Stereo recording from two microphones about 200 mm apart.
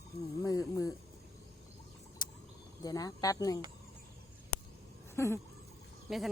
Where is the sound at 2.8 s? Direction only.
20° left (ahead or behind).